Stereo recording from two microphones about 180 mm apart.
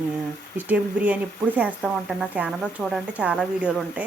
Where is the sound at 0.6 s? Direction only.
10° right (ahead or behind).